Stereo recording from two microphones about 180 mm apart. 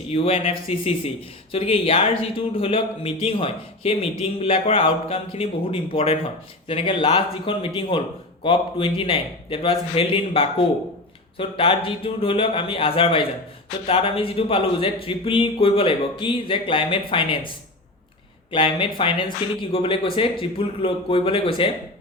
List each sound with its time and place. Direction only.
0.1 s speech: 30° left (ahead or behind)
18.5 s speech: 30° left (ahead or behind)